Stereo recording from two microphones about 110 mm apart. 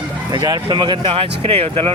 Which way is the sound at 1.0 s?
60° right (ahead or behind).